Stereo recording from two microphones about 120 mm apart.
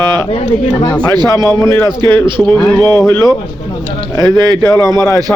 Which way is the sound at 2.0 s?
40° right (ahead or behind).